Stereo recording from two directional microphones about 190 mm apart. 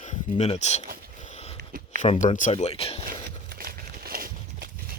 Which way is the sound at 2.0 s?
40° left (ahead or behind).